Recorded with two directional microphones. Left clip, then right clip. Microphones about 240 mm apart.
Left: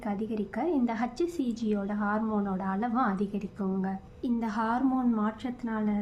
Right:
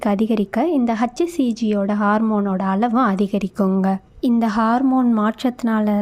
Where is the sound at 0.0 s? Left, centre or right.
Right.